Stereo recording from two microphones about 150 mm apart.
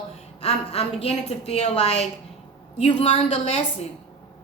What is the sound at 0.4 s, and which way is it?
A woman's voice, 45° left (ahead or behind).